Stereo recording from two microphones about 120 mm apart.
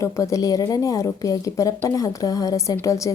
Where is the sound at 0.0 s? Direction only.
25° left (ahead or behind).